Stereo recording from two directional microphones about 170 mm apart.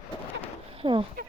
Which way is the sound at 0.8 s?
30° right (ahead or behind).